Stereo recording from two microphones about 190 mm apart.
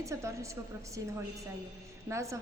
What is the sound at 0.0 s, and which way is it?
Speech, 15° right (ahead or behind).